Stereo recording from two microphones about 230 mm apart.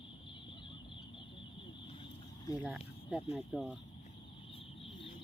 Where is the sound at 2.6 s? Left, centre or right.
Centre.